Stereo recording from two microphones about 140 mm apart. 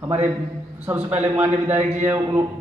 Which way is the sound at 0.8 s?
10° right (ahead or behind).